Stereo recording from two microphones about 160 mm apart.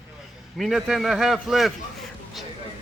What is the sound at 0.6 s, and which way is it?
A man's voice, centre (ahead or behind).